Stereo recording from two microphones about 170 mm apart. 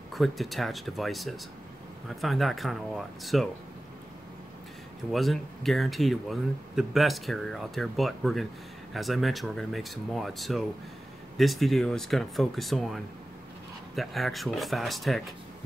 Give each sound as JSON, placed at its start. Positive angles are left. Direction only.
{"t": 0.1, "sound": "speech", "side_deg": 0}
{"t": 5.1, "sound": "speech", "side_deg": 0}